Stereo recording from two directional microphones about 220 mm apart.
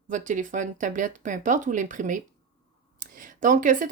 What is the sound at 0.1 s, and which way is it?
Speech, 35° right (ahead or behind).